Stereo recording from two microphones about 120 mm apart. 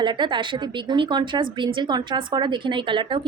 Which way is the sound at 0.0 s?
40° right (ahead or behind).